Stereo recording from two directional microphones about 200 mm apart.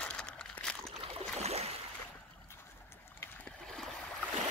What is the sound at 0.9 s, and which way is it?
Boat, 30° right (ahead or behind).